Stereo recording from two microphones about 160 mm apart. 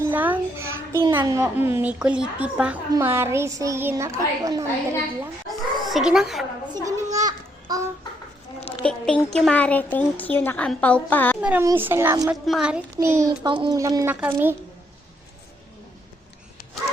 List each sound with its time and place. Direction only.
0.0 s a sound: 10° right (ahead or behind)
1.1 s a woman's voice: 20° right (ahead or behind)
5.5 s a sound: centre (ahead or behind)
6.8 s children playing: 20° right (ahead or behind)
7.3 s babbling: 25° right (ahead or behind)
8.8 s a woman's voice: 5° left (ahead or behind)
11.3 s a woman's voice: 10° right (ahead or behind)
12.3 s a woman's voice: 5° right (ahead or behind)
13.0 s a child's voice: 20° right (ahead or behind)